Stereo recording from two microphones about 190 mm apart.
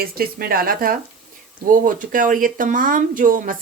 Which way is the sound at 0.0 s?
50° right (ahead or behind).